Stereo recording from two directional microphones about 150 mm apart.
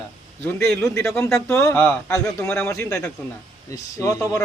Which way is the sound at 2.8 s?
20° left (ahead or behind).